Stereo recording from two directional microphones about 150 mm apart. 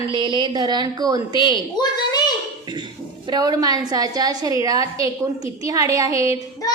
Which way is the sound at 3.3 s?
25° right (ahead or behind).